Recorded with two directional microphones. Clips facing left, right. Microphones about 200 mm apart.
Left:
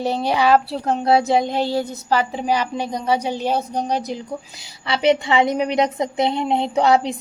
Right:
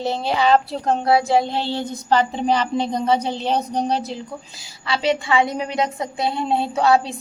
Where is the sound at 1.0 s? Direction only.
20° left (ahead or behind).